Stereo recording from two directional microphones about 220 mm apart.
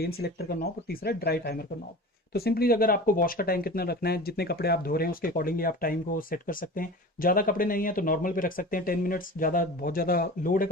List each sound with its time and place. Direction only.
0.0 s speech: 45° left (ahead or behind)